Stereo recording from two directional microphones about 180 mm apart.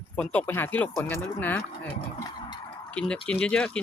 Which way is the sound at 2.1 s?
20° left (ahead or behind).